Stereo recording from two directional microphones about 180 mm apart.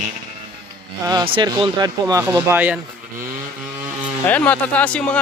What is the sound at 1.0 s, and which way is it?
Speech, 25° right (ahead or behind).